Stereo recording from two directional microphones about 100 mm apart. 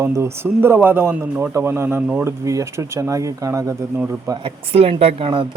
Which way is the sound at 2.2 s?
30° right (ahead or behind).